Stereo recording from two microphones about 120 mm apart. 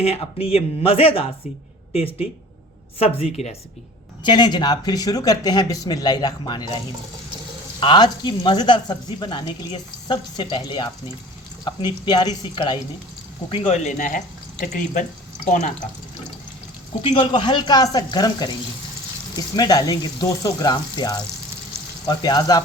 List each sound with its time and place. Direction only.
0.0 s speech: 55° left (ahead or behind)
3.4 s speech: 60° left (ahead or behind)
4.2 s speech: 40° left (ahead or behind)
13.5 s speech: 65° left (ahead or behind); by 14.2 s 80° left
17.0 s speech: 55° left (ahead or behind)
17.4 s speech: 35° left (ahead or behind)
19.5 s speech: 35° left (ahead or behind)